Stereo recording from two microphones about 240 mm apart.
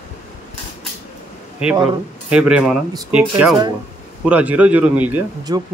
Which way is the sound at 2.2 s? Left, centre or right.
Centre.